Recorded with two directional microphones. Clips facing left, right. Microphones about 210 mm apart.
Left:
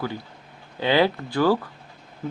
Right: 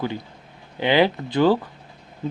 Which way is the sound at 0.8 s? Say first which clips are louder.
Right 2 dB; 20° right (ahead or behind).